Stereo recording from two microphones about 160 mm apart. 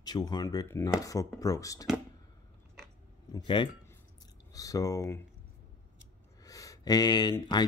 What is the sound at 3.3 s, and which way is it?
Speech, 30° left (ahead or behind).